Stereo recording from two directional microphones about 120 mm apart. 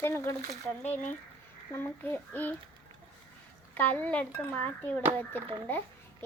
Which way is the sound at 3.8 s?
15° left (ahead or behind).